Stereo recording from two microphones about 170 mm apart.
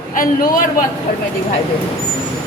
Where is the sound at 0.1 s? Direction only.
55° left (ahead or behind).